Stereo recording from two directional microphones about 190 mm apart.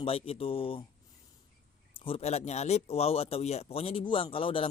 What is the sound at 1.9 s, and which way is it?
Speech, 30° left (ahead or behind).